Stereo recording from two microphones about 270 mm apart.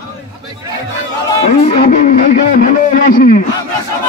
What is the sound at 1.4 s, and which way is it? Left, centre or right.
A man's voice, left.